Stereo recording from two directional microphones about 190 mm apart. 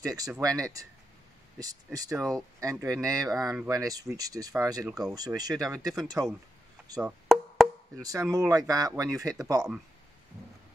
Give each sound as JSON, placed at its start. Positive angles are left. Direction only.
{"t": 0.4, "sound": "speech", "side_deg": -20}
{"t": 7.0, "sound": "wood block", "side_deg": 0}
{"t": 7.9, "sound": "speech", "side_deg": -20}